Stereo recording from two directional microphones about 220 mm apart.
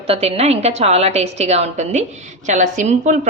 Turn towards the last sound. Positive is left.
turn(degrees=-35)  # may be behind; listen again after turning